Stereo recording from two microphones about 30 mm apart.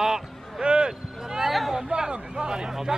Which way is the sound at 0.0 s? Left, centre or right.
Centre.